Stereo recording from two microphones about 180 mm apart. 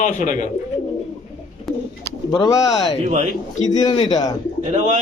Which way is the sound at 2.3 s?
20° left (ahead or behind).